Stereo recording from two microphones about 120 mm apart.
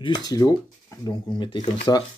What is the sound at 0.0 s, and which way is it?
Speech, 35° left (ahead or behind).